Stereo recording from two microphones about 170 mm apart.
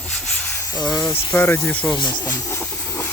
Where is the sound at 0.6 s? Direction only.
25° left (ahead or behind).